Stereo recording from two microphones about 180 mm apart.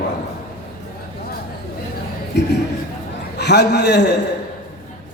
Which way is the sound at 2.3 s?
70° left (ahead or behind).